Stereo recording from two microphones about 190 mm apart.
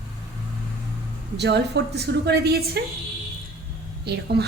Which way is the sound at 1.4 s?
60° right (ahead or behind).